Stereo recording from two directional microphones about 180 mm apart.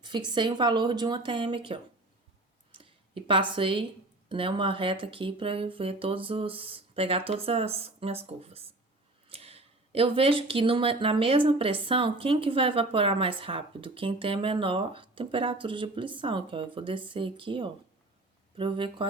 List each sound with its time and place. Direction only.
0.0 s speech: 25° right (ahead or behind)